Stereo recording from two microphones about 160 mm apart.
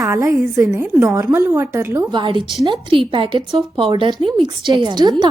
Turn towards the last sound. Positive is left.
turn(degrees=-25)  # may be behind; listen again after turning